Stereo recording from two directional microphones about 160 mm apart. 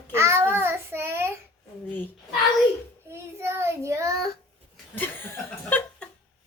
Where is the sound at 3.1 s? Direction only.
15° right (ahead or behind).